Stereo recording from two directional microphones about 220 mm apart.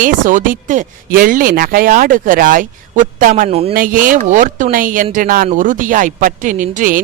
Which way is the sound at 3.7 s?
40° right (ahead or behind).